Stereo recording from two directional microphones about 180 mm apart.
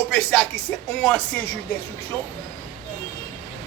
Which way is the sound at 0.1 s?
5° left (ahead or behind).